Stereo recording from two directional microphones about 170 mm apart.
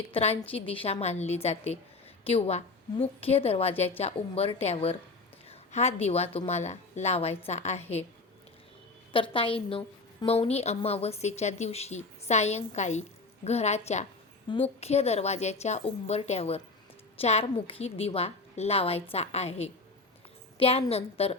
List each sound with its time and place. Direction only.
0.1 s a woman's voice: 35° left (ahead or behind)
9.1 s a woman's voice: 30° left (ahead or behind)